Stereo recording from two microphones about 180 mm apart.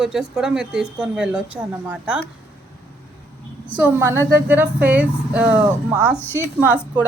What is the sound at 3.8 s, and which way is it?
A woman's voice, 15° right (ahead or behind).